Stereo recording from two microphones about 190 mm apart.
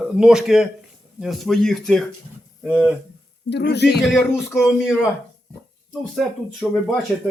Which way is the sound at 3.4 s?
60° left (ahead or behind).